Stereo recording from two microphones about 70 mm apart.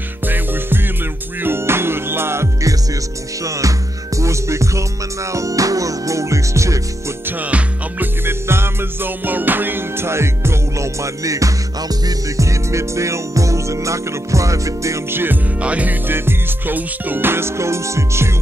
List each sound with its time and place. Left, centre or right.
1.4 s music: right
3.4 s music: right
7.2 s music: right
15.0 s music: right
15.6 s music: right